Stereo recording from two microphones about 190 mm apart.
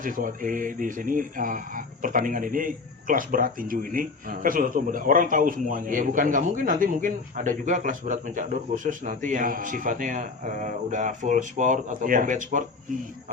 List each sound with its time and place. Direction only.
0.0 s speech: 45° right (ahead or behind)